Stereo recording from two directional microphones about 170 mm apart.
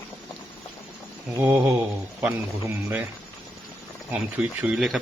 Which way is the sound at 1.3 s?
15° right (ahead or behind).